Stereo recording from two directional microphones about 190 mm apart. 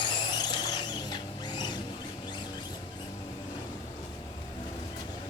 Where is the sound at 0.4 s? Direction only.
20° left (ahead or behind).